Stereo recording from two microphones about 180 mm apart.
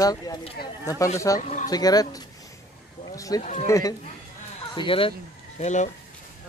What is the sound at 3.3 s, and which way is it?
Speech, 20° left (ahead or behind).